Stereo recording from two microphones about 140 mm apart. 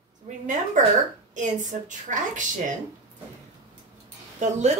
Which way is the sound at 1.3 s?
60° right (ahead or behind).